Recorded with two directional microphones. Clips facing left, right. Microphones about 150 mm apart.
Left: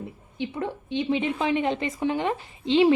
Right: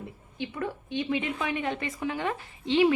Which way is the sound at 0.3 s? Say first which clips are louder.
Left 3 dB; 25° left (ahead or behind).